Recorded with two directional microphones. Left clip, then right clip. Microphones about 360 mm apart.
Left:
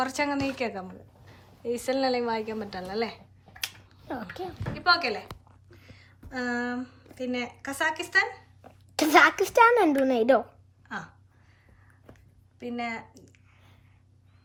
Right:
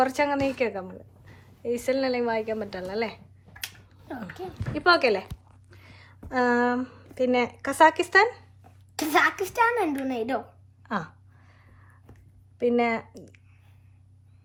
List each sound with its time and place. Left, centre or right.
0.0 s a woman's voice: centre
3.6 s finger snapping: centre
4.5 s a woman's voice: centre
9.0 s a child's voice: left
10.8 s a sound: centre
12.5 s a woman's voice: centre